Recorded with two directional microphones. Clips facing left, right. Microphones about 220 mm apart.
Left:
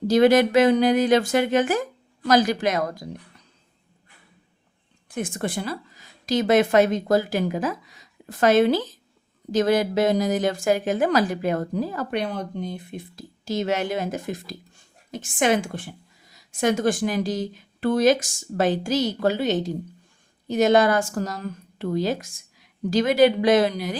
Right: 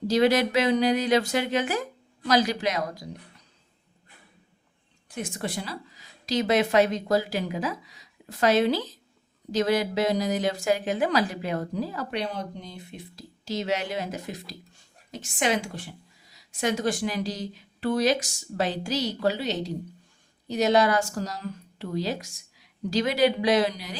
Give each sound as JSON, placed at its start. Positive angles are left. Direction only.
{"t": 0.1, "sound": "a woman's voice", "side_deg": 50}
{"t": 5.0, "sound": "a woman's voice", "side_deg": 50}